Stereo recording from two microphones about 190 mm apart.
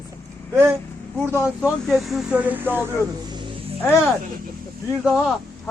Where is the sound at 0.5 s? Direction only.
10° right (ahead or behind).